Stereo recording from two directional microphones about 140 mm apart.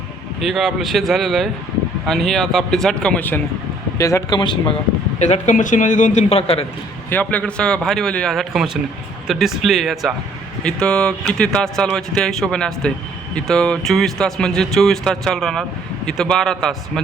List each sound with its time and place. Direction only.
0.3 s speech: centre (ahead or behind)
3.9 s speech: 20° left (ahead or behind)
5.2 s a man's voice: 60° left (ahead or behind)
7.1 s a man's voice: 10° left (ahead or behind)